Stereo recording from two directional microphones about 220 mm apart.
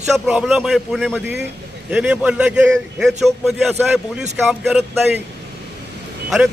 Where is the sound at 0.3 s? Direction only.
Centre (ahead or behind).